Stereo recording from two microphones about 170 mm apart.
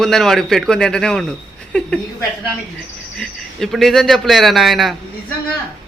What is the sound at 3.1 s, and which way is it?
Speech, centre (ahead or behind).